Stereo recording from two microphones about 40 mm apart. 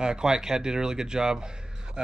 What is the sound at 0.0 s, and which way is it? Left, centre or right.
Speech, centre.